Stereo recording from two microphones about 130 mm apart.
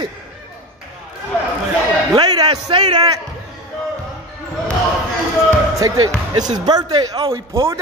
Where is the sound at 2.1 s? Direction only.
30° right (ahead or behind).